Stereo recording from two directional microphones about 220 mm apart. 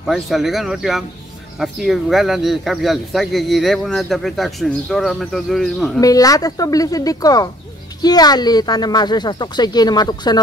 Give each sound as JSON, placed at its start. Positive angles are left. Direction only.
{"t": 0.0, "sound": "speech", "side_deg": 0}
{"t": 5.9, "sound": "speech", "side_deg": 15}